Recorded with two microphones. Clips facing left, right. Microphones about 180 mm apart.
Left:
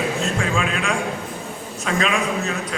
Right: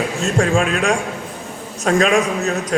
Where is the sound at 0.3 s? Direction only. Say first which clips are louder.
Right 6 dB; 45° right (ahead or behind).